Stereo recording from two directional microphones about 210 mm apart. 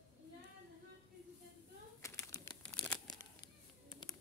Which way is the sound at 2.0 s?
15° left (ahead or behind).